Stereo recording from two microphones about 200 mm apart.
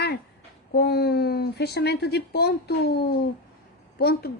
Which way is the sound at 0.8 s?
55° left (ahead or behind).